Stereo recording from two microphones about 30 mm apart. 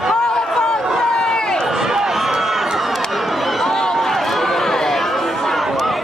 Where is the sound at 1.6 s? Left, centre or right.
Centre.